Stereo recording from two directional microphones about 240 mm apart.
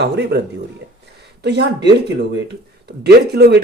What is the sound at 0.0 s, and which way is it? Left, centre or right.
Speech, right.